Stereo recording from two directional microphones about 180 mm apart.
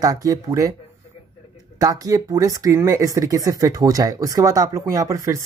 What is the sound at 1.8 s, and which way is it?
Speech, 20° right (ahead or behind).